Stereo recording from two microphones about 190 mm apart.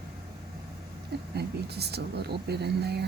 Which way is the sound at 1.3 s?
60° right (ahead or behind).